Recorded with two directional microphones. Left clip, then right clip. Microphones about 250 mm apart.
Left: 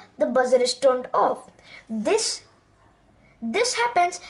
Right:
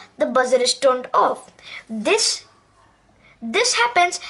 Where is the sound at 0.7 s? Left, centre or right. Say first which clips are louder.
Right 3 dB; centre.